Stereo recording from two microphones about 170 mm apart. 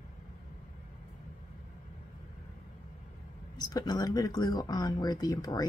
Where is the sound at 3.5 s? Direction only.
25° left (ahead or behind).